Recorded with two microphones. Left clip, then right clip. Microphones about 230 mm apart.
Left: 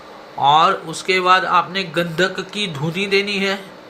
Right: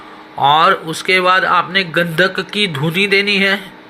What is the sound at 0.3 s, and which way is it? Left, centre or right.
Speech, centre.